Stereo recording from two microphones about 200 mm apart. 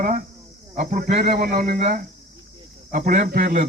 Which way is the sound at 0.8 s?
45° right (ahead or behind).